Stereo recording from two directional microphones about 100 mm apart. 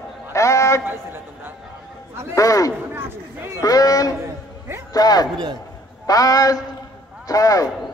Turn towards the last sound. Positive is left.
turn(degrees=35)  # may be behind; listen again after turning